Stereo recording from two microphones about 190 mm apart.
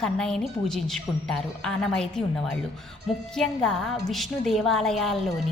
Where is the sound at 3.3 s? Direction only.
5° left (ahead or behind).